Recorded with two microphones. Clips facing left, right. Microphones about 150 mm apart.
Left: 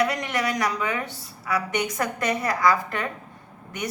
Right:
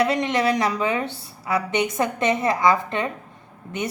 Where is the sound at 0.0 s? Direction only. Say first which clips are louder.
Right 4 dB; 25° right (ahead or behind).